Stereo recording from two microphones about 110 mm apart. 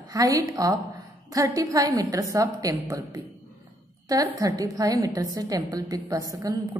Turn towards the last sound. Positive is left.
turn(degrees=-35)  # may be behind; listen again after turning